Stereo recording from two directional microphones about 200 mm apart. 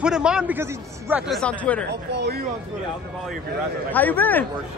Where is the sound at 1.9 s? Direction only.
55° right (ahead or behind).